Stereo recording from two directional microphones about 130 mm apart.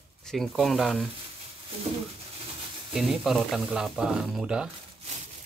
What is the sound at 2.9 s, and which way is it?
Speech, centre (ahead or behind).